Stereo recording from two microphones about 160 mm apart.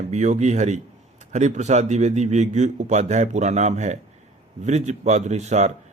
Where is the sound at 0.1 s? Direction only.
45° right (ahead or behind).